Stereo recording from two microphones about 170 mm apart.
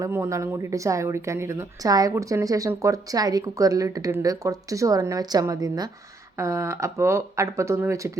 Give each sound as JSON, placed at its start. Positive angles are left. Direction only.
{"t": 0.0, "sound": "a woman's voice", "side_deg": -20}